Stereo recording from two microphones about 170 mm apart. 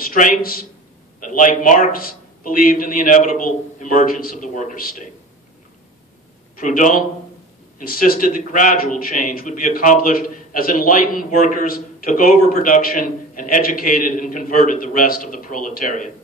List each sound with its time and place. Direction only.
0.0 s a man's voice: 55° left (ahead or behind)
6.5 s a man's voice: 55° left (ahead or behind)